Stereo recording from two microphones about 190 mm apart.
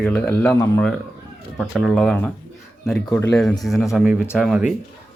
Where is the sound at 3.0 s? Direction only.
15° left (ahead or behind).